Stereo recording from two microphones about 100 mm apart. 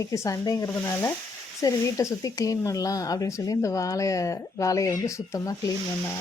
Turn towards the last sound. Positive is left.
turn(degrees=35)  # may be behind; listen again after turning